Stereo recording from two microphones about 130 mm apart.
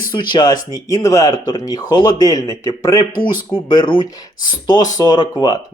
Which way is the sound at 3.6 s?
35° left (ahead or behind).